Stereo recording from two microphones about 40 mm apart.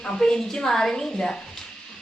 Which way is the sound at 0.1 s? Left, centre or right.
Centre.